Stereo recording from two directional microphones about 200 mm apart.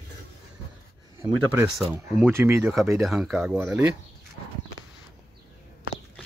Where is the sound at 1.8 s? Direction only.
10° right (ahead or behind).